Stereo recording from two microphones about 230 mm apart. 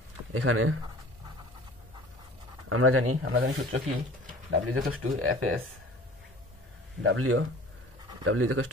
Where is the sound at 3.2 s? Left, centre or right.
Right.